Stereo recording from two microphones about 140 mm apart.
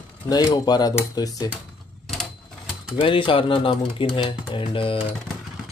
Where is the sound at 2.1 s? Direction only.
Centre (ahead or behind).